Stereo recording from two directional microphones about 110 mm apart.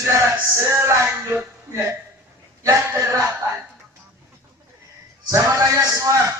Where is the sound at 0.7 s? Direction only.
25° right (ahead or behind).